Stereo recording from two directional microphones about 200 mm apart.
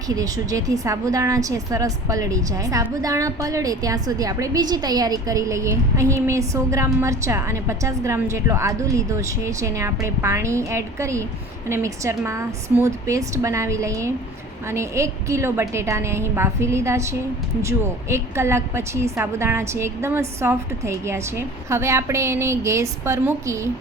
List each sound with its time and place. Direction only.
0.1 s a woman's voice: 15° right (ahead or behind)